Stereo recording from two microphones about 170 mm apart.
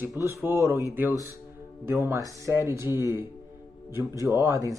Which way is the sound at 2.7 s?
15° right (ahead or behind).